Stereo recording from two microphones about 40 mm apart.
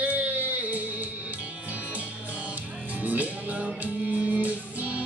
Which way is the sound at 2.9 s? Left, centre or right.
Right.